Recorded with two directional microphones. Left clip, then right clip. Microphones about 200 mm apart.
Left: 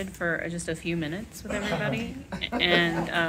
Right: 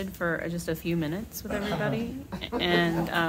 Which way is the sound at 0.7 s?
25° right (ahead or behind).